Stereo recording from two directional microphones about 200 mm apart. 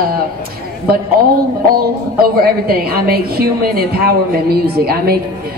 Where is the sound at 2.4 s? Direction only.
50° right (ahead or behind).